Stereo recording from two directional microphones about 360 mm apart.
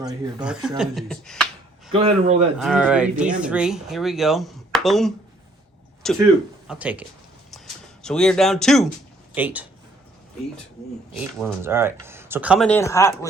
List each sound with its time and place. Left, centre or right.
0.3 s speech: centre
2.0 s speech: centre
2.6 s speech: centre
8.0 s speech: centre
11.2 s speech: centre